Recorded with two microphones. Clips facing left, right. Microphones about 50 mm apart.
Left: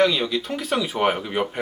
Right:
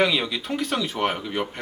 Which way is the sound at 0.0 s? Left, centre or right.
Centre.